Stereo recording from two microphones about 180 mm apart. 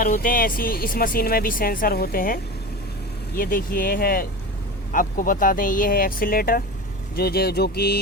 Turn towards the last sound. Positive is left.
turn(degrees=60)  # may be behind; listen again after turning